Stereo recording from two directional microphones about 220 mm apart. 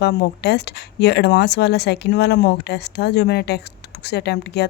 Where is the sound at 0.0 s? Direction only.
50° left (ahead or behind).